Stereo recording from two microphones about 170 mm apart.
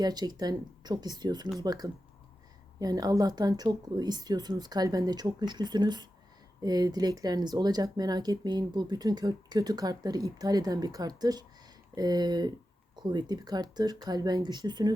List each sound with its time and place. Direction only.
0.0 s speech: 25° right (ahead or behind)